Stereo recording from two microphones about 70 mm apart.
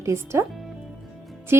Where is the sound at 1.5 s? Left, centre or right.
Right.